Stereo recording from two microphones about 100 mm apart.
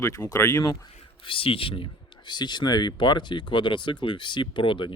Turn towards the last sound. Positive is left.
turn(degrees=55)  # may be behind; listen again after turning